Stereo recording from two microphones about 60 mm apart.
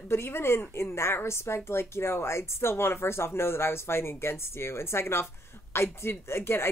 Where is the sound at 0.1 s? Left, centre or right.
Left.